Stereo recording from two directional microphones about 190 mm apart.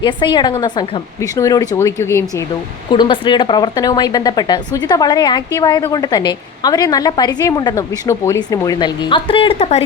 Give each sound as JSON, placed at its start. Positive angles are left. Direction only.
{"t": 0.0, "sound": "speech", "side_deg": 25}
{"t": 2.9, "sound": "speech", "side_deg": 25}